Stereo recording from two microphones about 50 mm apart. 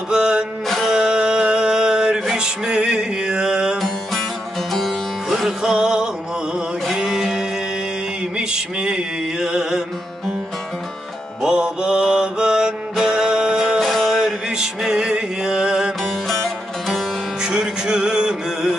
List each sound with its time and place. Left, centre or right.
0.1 s music: centre
4.7 s music: centre
11.4 s music: centre
13.8 s music: centre
16.8 s music: centre
17.4 s music: centre